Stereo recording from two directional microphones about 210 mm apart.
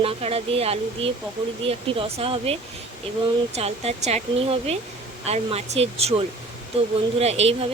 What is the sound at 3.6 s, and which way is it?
Speech, 30° right (ahead or behind).